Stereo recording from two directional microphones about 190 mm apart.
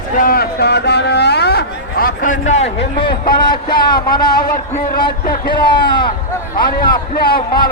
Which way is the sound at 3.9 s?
20° left (ahead or behind).